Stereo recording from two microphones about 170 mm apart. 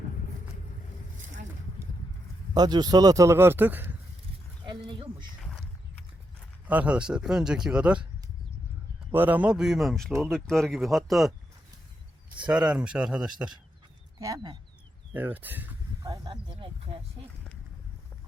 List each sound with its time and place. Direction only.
2.6 s a man's voice: 25° right (ahead or behind)
4.6 s a sound: 30° right (ahead or behind)
5.4 s a sound: 5° left (ahead or behind)
6.7 s speech: 10° right (ahead or behind)
9.1 s speech: 10° right (ahead or behind)
12.4 s speech: 5° right (ahead or behind)
14.2 s speech: 20° right (ahead or behind)
15.1 s a man's voice: 10° right (ahead or behind)
16.0 s speech: 25° right (ahead or behind)